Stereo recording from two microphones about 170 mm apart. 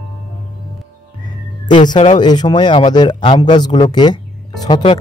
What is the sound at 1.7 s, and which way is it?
Speech, 30° left (ahead or behind).